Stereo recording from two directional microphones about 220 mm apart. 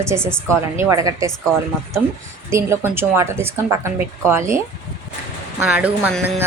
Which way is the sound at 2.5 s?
10° right (ahead or behind).